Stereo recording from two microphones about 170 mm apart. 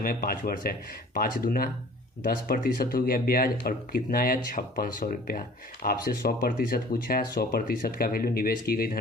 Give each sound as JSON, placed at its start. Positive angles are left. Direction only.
{"t": 0.0, "sound": "speech", "side_deg": 60}